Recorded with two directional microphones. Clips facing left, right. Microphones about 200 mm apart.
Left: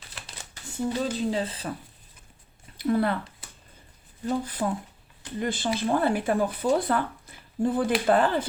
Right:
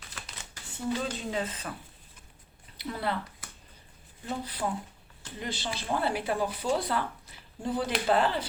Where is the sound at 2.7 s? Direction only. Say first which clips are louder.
Left 9 dB; 50° left (ahead or behind).